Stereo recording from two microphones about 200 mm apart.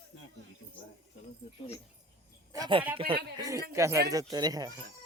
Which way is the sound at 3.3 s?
15° right (ahead or behind).